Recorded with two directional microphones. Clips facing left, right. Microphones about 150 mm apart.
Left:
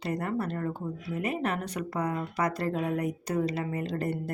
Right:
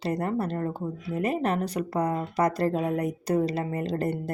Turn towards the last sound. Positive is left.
turn(degrees=-35)  # may be behind; listen again after turning